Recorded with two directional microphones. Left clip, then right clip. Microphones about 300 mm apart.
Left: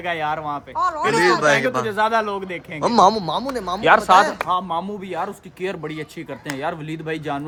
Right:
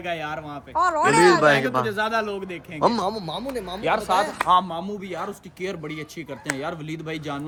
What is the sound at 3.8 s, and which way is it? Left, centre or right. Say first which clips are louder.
Speech: left 8 dB; left.